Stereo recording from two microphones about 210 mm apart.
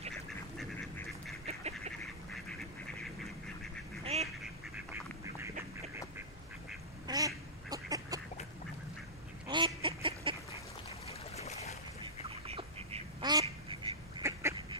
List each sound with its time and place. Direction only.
0.6 s duck: centre (ahead or behind)
1.4 s duck: 30° right (ahead or behind)
4.0 s duck: 30° right (ahead or behind)
4.7 s duck: 15° right (ahead or behind)
7.1 s duck: 15° right (ahead or behind)
9.5 s bird: 20° right (ahead or behind)
11.1 s a sound: 30° left (ahead or behind)
12.3 s duck: 30° right (ahead or behind); by 14.4 s 15° right (ahead or behind)